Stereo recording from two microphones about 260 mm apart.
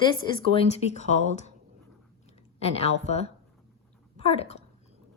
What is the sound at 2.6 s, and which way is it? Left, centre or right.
A woman's voice, left.